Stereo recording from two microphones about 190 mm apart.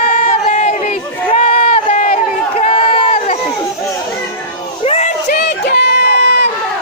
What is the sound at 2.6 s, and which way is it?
Crowd, 35° left (ahead or behind).